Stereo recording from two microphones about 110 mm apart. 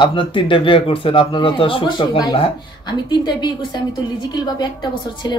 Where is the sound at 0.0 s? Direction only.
50° left (ahead or behind).